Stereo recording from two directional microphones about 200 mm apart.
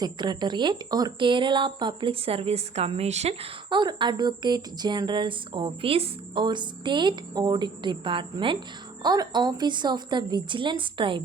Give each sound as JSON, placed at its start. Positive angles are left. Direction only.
{"t": 0.0, "sound": "speech", "side_deg": -20}